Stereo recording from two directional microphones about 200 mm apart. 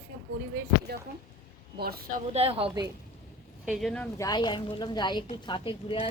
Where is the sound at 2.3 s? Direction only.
30° right (ahead or behind).